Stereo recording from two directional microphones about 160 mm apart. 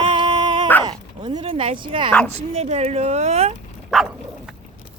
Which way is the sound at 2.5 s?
40° right (ahead or behind).